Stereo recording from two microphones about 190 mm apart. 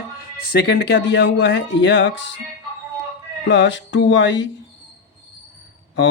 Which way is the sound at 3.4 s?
70° left (ahead or behind).